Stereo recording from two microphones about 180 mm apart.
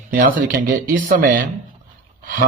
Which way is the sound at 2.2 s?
55° right (ahead or behind).